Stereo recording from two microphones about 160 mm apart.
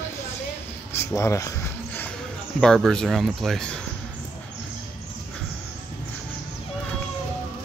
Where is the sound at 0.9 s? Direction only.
15° left (ahead or behind).